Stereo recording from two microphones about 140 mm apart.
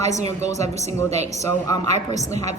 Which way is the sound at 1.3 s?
20° left (ahead or behind).